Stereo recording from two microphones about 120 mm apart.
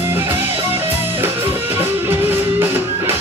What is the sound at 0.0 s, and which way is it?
Music, 20° right (ahead or behind).